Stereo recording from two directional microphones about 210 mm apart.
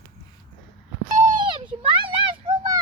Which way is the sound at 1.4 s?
25° right (ahead or behind).